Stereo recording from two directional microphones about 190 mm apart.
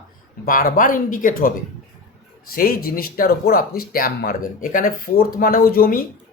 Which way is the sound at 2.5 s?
50° left (ahead or behind).